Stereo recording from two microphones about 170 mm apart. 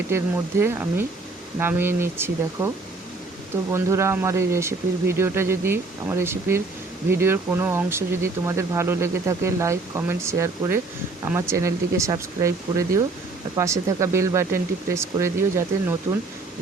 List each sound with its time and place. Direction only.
0.1 s speech: 15° right (ahead or behind)